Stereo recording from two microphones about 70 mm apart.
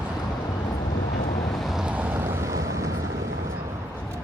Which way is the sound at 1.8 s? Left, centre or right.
Right.